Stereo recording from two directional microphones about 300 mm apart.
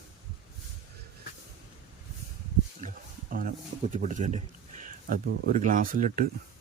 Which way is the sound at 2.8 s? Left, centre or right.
Right.